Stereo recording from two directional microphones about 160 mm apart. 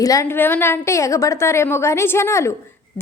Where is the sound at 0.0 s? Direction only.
20° left (ahead or behind).